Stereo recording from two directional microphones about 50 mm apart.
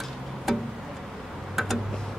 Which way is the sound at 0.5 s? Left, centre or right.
Centre.